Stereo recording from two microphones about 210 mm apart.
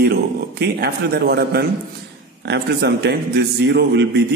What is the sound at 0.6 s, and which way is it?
A man's voice, 50° right (ahead or behind).